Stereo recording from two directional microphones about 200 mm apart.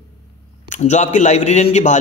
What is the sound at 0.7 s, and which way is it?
A man's voice, 35° left (ahead or behind).